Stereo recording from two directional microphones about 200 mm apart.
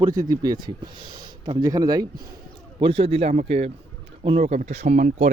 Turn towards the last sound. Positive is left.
turn(degrees=-40)  # may be behind; listen again after turning